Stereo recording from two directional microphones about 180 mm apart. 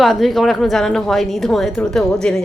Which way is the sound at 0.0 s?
Centre (ahead or behind).